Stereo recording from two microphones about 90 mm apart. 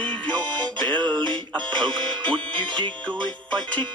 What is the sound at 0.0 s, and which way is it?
Music, 15° left (ahead or behind).